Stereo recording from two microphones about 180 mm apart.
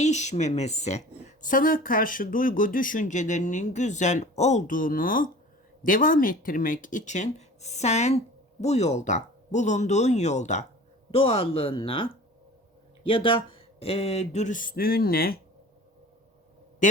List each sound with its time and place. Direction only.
0.0 s speech: 40° left (ahead or behind)
13.1 s speech: 30° left (ahead or behind); by 15.4 s 55° left (ahead or behind)
16.8 s a sound: 45° left (ahead or behind)